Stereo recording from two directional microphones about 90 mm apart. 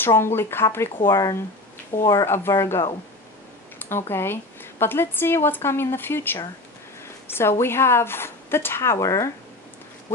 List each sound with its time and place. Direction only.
0.0 s speech: 25° left (ahead or behind)